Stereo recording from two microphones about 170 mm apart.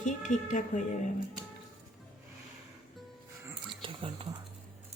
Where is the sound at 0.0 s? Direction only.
50° left (ahead or behind).